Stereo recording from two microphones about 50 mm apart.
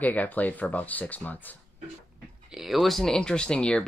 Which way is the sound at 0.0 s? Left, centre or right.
Left.